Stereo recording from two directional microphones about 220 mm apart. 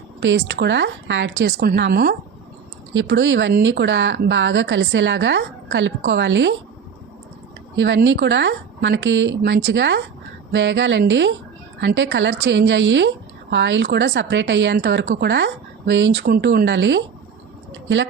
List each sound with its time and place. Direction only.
0.2 s speech: 55° right (ahead or behind)
2.9 s a woman's voice: 55° right (ahead or behind)
7.8 s a woman's voice: 55° right (ahead or behind)